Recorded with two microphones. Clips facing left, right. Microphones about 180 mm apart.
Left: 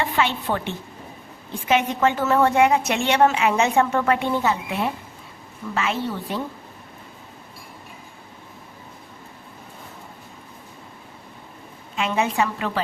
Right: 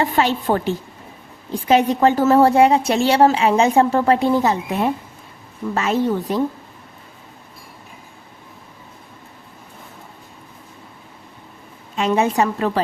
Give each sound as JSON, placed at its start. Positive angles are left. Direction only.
{"t": 0.0, "sound": "a woman's voice", "side_deg": -40}
{"t": 11.9, "sound": "a woman's voice", "side_deg": -40}